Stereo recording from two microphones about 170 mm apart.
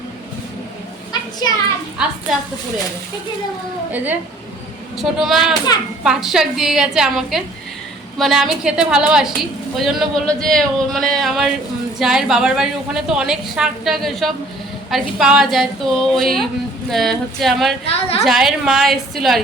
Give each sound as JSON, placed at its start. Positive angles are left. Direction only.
{"t": 3.9, "sound": "a woman's voice", "side_deg": -10}
{"t": 17.8, "sound": "a woman's voice", "side_deg": 35}
{"t": 18.3, "sound": "a woman's voice", "side_deg": 0}